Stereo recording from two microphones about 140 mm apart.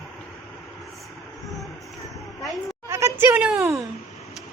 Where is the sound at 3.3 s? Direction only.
5° right (ahead or behind).